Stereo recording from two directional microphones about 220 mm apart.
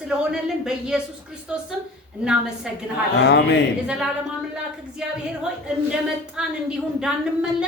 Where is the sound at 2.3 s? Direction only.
5° right (ahead or behind).